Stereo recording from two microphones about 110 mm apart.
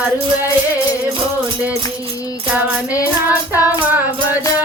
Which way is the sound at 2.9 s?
30° left (ahead or behind).